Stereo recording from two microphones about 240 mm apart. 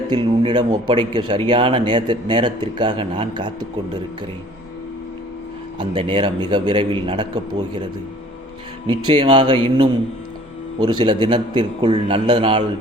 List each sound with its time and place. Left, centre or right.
0.1 s a man's voice: centre
5.8 s a man's voice: right
9.0 s a man's voice: centre